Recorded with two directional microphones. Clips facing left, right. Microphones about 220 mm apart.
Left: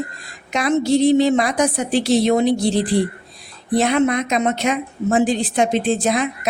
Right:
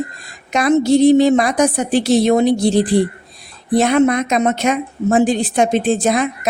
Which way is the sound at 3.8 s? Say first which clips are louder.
Right 4 dB; 45° right (ahead or behind).